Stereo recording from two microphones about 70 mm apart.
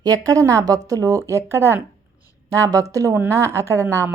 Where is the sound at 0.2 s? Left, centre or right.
Right.